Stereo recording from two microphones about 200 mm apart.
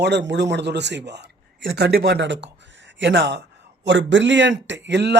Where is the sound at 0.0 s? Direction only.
60° right (ahead or behind).